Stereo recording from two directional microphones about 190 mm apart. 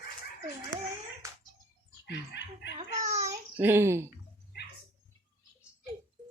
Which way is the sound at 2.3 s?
65° left (ahead or behind).